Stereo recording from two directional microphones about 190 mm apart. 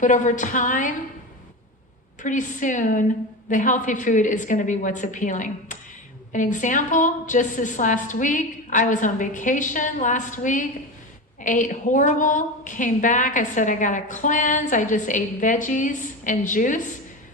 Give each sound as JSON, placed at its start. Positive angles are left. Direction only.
{"t": 0.0, "sound": "a woman's voice", "side_deg": 40}
{"t": 2.2, "sound": "a woman's voice", "side_deg": 40}